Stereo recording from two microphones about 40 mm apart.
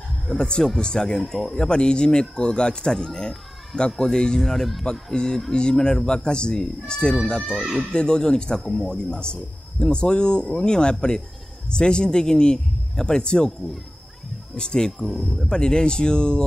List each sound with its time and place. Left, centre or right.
0.3 s a man's voice: centre
1.3 s speech: centre
1.7 s speech: left
2.9 s a man's voice: centre
4.5 s speech: centre
5.1 s a man's voice: centre
8.5 s speech: centre
8.9 s speech: left
14.6 s a man's voice: centre
14.9 s speech: centre
15.4 s speech: centre